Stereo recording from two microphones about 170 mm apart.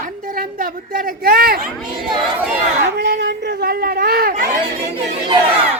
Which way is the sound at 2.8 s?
80° right.